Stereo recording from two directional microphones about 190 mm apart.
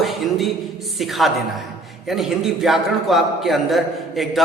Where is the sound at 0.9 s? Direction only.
Centre (ahead or behind).